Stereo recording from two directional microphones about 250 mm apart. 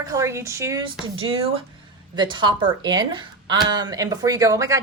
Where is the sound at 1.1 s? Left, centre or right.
Right.